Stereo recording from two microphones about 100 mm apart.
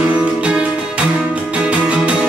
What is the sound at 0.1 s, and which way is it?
Music, 10° right (ahead or behind).